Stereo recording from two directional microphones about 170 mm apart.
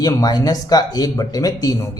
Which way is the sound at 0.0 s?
20° left (ahead or behind).